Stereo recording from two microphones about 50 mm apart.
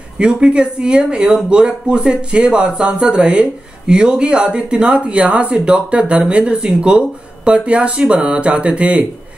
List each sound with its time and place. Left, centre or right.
0.2 s speech: centre